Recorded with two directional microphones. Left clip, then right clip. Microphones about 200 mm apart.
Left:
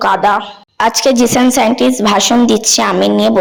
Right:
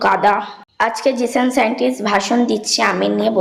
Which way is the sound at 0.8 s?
45° left (ahead or behind).